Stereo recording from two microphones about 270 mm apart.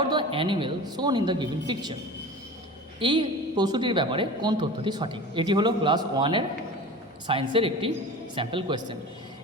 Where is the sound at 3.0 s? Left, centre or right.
Centre.